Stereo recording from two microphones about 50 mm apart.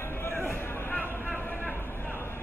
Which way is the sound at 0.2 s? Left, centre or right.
Left.